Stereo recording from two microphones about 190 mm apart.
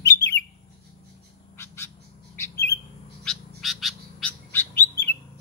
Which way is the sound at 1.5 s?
15° left (ahead or behind).